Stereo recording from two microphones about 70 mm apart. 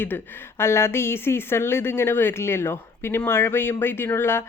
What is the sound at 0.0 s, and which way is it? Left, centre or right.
Speech, left.